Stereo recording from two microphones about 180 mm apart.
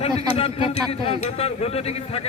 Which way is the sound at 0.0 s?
35° left (ahead or behind).